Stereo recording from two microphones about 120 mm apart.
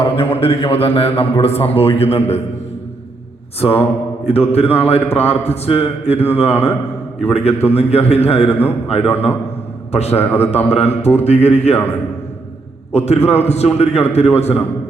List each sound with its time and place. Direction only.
0.0 s speech: 50° left (ahead or behind)
3.6 s mantra: 55° left (ahead or behind)
4.3 s speech: 60° left (ahead or behind)
9.9 s speech: 60° left (ahead or behind)
10.2 s a man's voice: 20° left (ahead or behind)
10.4 s speech: 60° left (ahead or behind)
12.9 s speech: 65° left (ahead or behind)